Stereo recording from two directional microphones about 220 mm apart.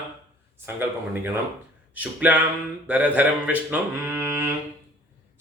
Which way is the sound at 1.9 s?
5° right (ahead or behind).